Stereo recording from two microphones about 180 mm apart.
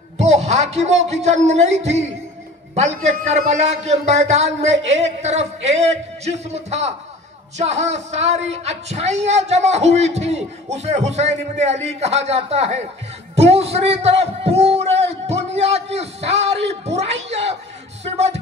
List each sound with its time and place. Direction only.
0.2 s a man's voice: 40° right (ahead or behind)